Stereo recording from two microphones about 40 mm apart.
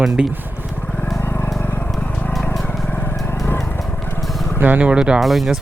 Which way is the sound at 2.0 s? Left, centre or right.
Left.